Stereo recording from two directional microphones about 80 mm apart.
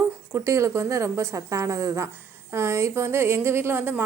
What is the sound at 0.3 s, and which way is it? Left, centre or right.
Speech, right.